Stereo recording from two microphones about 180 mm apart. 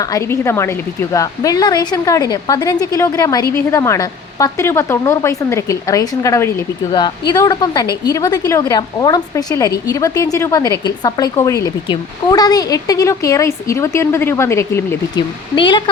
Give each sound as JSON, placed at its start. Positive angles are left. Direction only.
{"t": 0.0, "sound": "speech", "side_deg": 15}
{"t": 15.5, "sound": "speech", "side_deg": 25}